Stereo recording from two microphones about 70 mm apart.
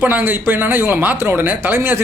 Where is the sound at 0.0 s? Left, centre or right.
Right.